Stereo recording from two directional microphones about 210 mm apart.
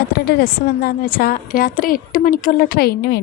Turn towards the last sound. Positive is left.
turn(degrees=50)  # may be behind; listen again after turning